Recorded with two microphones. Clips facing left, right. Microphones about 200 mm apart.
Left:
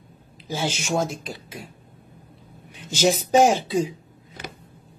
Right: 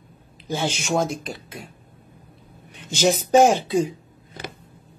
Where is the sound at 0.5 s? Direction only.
5° left (ahead or behind).